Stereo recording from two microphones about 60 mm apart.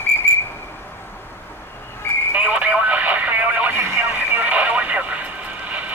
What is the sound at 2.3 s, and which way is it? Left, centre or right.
Radio, right.